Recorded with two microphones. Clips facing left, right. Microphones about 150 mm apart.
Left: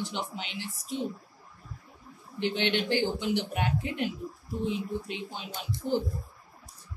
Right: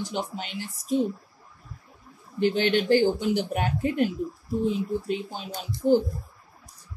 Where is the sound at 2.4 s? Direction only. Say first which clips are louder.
Right 6 dB; 45° right (ahead or behind).